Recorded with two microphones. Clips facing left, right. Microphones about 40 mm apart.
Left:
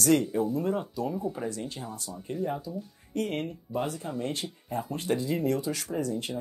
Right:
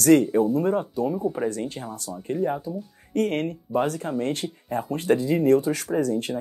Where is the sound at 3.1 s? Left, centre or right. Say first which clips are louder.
Right 7 dB; right.